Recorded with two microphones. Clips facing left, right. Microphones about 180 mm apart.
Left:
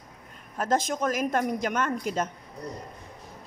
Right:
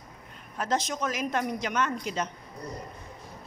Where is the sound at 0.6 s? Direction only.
50° left (ahead or behind).